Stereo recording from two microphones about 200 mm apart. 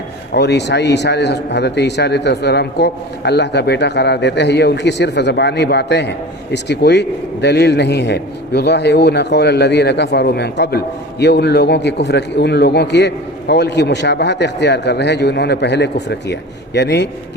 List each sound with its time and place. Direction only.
0.3 s a man's voice: 60° left (ahead or behind)